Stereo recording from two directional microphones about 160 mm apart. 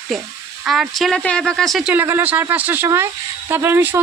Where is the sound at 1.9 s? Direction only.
15° right (ahead or behind).